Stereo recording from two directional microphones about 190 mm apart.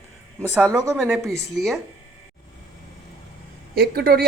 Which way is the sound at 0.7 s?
15° right (ahead or behind).